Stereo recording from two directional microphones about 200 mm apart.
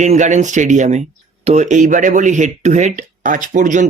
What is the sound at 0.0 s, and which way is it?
Speech, 35° right (ahead or behind).